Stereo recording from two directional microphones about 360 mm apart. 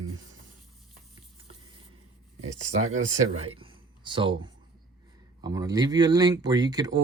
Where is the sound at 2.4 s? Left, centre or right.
Centre.